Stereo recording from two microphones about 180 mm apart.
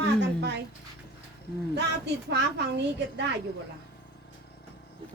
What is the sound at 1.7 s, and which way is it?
Speech, 70° right (ahead or behind).